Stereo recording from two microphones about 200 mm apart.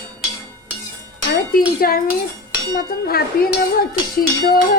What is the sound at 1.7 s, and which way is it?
A woman's voice, 50° left (ahead or behind).